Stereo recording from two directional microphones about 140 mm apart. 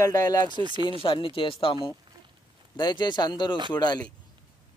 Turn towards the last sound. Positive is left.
turn(degrees=30)  # may be behind; listen again after turning